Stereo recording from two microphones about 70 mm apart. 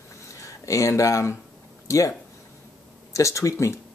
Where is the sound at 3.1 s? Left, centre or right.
Left.